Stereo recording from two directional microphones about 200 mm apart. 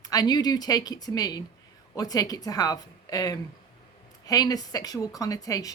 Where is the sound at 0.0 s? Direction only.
20° left (ahead or behind).